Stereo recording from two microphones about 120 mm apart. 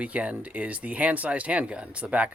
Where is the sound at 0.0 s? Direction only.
10° right (ahead or behind).